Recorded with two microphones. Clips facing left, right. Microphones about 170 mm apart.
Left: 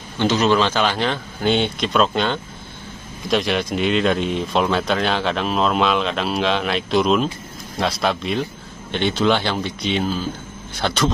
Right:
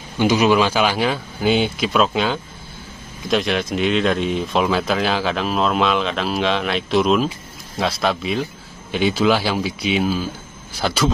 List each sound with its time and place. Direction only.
0.2 s speech: 10° right (ahead or behind)